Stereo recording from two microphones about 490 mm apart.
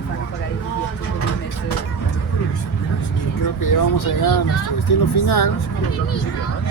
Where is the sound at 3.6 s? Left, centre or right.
Left.